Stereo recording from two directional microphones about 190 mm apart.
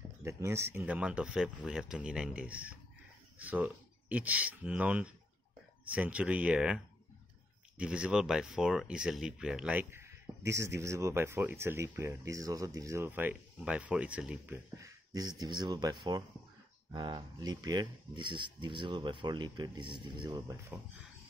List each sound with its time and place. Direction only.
0.2 s speech: 15° right (ahead or behind)